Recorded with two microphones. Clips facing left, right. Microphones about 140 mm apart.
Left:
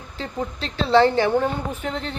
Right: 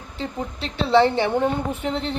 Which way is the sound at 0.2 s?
20° right (ahead or behind).